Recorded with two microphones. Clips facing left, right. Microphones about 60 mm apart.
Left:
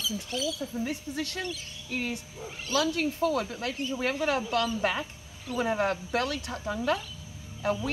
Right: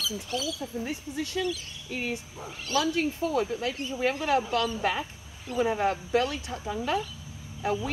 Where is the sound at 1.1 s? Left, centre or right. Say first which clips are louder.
Right 4 dB; left.